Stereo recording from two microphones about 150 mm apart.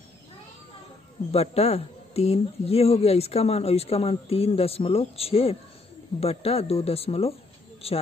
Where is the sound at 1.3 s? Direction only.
40° left (ahead or behind).